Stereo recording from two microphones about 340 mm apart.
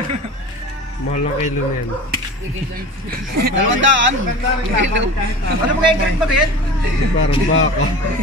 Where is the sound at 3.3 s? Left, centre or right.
Right.